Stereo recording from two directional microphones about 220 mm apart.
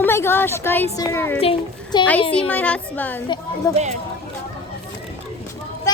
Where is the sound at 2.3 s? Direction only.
5° left (ahead or behind).